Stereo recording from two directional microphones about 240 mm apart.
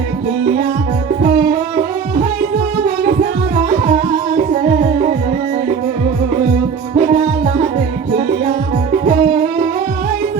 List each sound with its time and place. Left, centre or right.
2.8 s music: right
4.6 s music: right
6.9 s music: right
8.9 s music: right